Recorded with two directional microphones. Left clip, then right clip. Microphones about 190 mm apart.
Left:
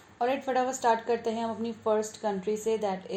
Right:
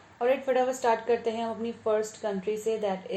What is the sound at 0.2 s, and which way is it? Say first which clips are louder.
Speech: right 2 dB; 40° left (ahead or behind).